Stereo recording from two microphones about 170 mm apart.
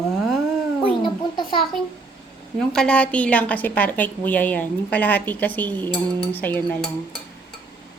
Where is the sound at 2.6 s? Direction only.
5° left (ahead or behind).